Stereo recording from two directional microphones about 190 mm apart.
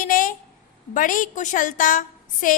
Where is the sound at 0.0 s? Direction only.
45° left (ahead or behind).